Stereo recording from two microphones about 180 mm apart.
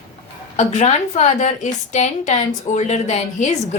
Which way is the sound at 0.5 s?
40° left (ahead or behind).